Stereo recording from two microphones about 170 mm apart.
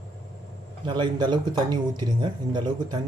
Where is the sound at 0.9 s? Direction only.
25° right (ahead or behind).